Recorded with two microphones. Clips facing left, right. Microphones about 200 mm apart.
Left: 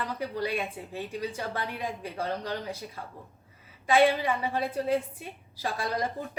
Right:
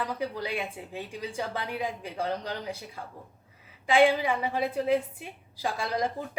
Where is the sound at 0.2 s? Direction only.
10° right (ahead or behind).